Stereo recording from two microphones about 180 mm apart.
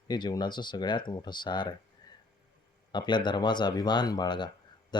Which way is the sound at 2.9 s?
25° left (ahead or behind).